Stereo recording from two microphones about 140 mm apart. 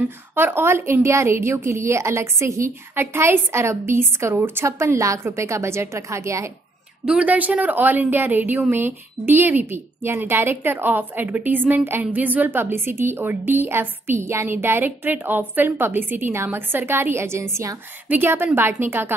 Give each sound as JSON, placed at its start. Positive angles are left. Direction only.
{"t": 0.0, "sound": "a woman's voice", "side_deg": -15}
{"t": 7.1, "sound": "a woman's voice", "side_deg": -10}